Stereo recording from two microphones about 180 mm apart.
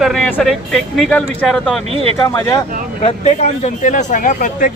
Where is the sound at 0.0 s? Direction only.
Centre (ahead or behind).